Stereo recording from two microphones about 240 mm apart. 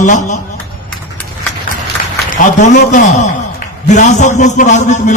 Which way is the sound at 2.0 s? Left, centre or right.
Left.